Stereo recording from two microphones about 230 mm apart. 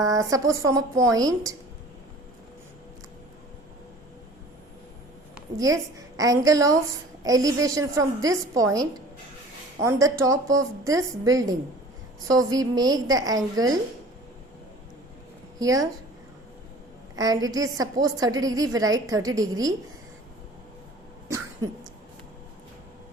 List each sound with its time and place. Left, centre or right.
0.0 s a woman's voice: centre
5.3 s a woman's voice: centre
15.5 s a woman's voice: centre
17.2 s a woman's voice: centre